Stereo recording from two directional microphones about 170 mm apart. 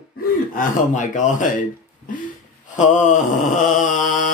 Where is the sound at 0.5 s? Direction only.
50° left (ahead or behind).